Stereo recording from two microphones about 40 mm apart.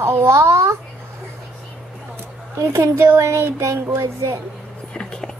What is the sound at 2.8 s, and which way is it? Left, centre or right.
A child's voice, right.